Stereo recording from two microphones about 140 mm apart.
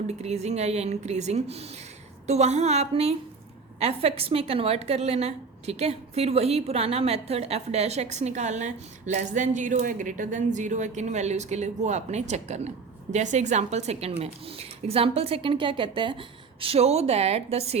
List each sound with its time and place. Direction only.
0.2 s a woman's voice: 50° right (ahead or behind)